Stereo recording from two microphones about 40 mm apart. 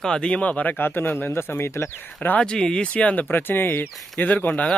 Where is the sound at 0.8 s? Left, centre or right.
Left.